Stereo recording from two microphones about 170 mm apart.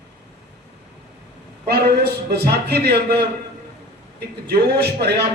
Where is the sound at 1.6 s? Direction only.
70° right (ahead or behind).